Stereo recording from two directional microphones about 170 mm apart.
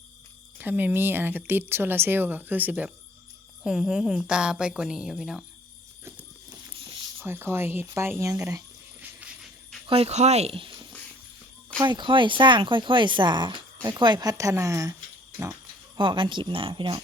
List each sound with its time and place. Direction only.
0.6 s a woman's voice: 10° right (ahead or behind)
7.2 s speech: 15° right (ahead or behind)
9.8 s speech: 35° right (ahead or behind); by 14.9 s 20° right (ahead or behind)
16.0 s speech: 30° right (ahead or behind)